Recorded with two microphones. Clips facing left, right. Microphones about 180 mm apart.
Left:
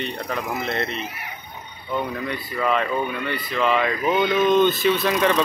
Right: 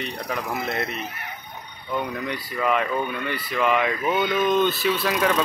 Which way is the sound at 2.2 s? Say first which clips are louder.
Left 1 dB; 10° right (ahead or behind).